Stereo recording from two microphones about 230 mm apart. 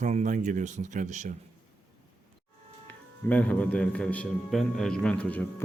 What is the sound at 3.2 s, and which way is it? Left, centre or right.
A man's voice, centre.